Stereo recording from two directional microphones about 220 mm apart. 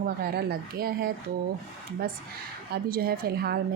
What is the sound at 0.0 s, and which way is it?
Speech, 45° right (ahead or behind).